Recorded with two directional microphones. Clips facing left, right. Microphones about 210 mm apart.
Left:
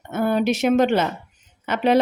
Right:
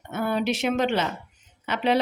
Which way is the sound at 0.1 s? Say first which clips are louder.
Left 5 dB; 45° left (ahead or behind).